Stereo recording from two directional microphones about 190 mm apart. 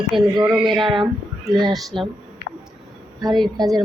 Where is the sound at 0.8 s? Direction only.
25° right (ahead or behind).